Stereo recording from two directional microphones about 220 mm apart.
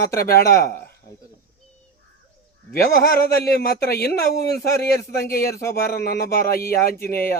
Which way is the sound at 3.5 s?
45° left (ahead or behind).